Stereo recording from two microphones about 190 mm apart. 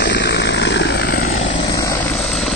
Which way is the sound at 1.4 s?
30° left (ahead or behind).